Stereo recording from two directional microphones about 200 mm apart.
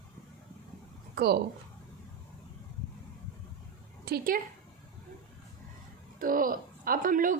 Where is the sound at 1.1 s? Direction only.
55° right (ahead or behind).